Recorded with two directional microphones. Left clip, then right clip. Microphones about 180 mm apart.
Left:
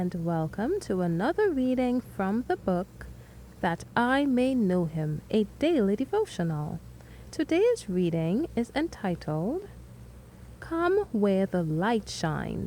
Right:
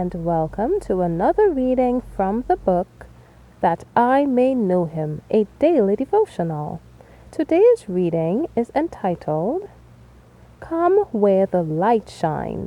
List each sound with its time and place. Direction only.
0.0 s a woman's voice: 30° right (ahead or behind)
7.3 s a woman's voice: 40° right (ahead or behind)
10.6 s a woman's voice: 35° right (ahead or behind)